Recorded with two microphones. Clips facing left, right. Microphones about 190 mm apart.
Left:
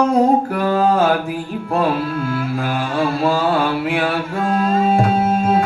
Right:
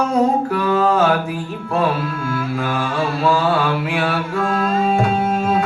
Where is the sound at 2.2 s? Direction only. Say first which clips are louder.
Left 1 dB; 35° left (ahead or behind).